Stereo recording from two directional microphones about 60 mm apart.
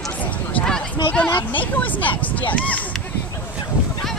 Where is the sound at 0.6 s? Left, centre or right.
Centre.